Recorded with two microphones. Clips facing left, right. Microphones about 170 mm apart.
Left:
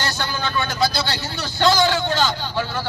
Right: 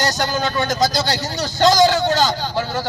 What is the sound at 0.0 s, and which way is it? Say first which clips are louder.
Speech: right 5 dB; 40° right (ahead or behind).